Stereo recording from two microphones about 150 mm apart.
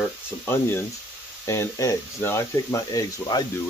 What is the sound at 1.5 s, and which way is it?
Speech, 20° left (ahead or behind).